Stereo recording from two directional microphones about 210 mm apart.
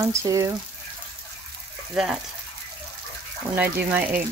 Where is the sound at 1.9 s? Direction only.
5° right (ahead or behind).